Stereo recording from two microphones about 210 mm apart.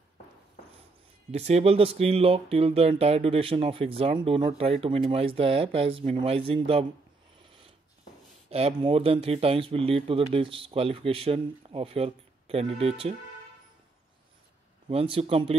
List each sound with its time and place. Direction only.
1.3 s speech: 30° right (ahead or behind)
8.5 s speech: 30° right (ahead or behind)
14.9 s speech: 25° right (ahead or behind)